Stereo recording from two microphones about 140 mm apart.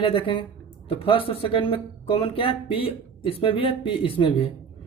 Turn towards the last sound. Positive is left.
turn(degrees=40)  # may be behind; listen again after turning